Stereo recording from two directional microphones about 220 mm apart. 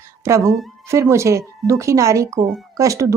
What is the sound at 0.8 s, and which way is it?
Speech, 10° right (ahead or behind).